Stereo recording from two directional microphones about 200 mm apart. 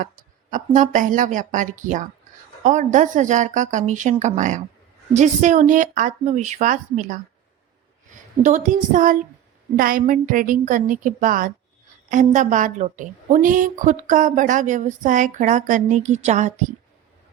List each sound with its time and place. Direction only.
0.5 s a woman's voice: 40° right (ahead or behind)
8.4 s a woman's voice: 40° right (ahead or behind)